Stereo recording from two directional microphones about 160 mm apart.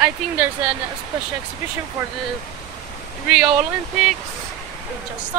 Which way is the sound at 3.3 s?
5° right (ahead or behind).